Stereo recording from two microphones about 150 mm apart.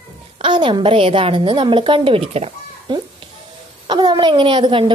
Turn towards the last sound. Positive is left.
turn(degrees=-35)  # may be behind; listen again after turning